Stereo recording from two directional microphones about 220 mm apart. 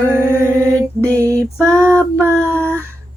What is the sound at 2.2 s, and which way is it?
Speech, 10° right (ahead or behind).